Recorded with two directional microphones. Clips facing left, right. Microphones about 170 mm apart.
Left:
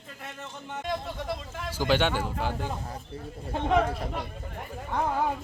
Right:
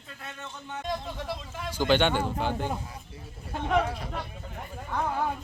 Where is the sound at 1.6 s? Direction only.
5° left (ahead or behind).